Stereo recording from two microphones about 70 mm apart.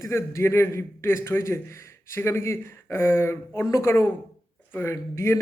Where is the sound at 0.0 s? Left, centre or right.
Left.